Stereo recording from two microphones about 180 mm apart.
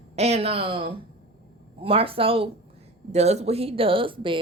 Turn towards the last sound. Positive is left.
turn(degrees=-30)  # may be behind; listen again after turning